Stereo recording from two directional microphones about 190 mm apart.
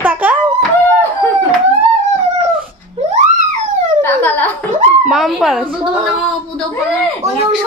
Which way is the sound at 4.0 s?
10° left (ahead or behind).